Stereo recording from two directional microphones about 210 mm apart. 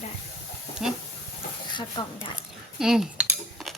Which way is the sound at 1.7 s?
20° left (ahead or behind).